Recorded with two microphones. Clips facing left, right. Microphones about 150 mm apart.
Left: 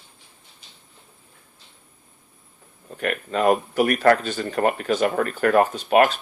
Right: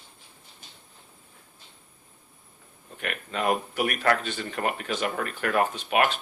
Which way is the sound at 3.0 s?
40° left (ahead or behind).